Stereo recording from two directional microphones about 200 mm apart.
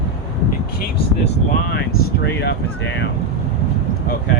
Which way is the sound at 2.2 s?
60° left (ahead or behind).